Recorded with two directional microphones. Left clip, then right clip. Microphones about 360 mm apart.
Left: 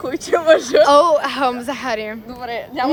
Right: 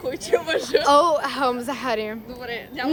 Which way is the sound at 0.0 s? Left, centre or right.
Centre.